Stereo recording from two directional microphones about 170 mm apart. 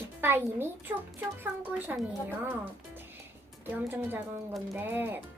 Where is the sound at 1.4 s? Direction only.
10° right (ahead or behind).